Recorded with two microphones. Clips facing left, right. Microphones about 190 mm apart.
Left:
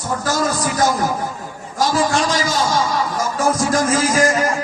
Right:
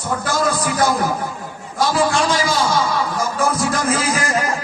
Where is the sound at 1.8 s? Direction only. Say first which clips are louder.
Even; 40° left (ahead or behind).